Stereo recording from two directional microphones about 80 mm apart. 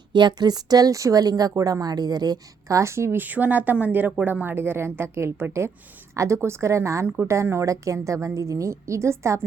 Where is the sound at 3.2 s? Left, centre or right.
Right.